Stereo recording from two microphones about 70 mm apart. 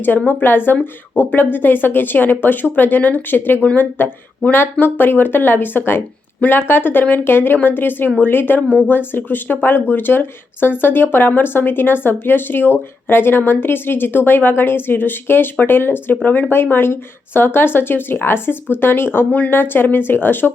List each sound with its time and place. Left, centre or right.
0.3 s speech: left